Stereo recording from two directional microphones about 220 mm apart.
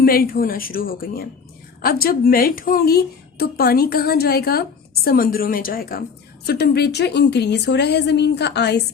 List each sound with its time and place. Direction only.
0.0 s a woman's voice: 40° left (ahead or behind)